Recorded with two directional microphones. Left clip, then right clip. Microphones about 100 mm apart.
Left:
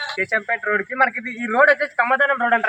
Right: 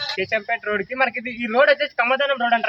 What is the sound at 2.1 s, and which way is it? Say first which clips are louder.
Speech: left 3 dB; 20° right (ahead or behind).